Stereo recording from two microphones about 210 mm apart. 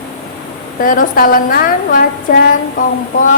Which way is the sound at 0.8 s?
40° left (ahead or behind).